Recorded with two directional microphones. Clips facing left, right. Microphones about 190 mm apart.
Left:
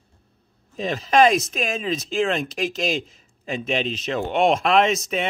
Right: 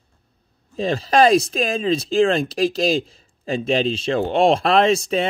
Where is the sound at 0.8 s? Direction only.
30° right (ahead or behind).